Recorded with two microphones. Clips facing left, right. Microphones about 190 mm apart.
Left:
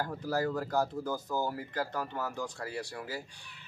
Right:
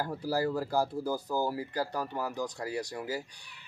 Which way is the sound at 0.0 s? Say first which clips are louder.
Right 1 dB; 10° right (ahead or behind).